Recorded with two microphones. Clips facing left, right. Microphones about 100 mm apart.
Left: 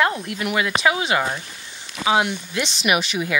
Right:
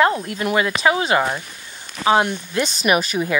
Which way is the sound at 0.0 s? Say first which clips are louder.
Right 4 dB; 35° right (ahead or behind).